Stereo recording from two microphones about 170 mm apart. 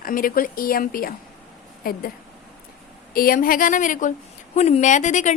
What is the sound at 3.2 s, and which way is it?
A woman's voice, 55° left (ahead or behind).